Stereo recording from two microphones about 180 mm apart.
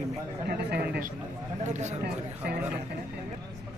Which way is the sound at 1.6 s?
40° right (ahead or behind).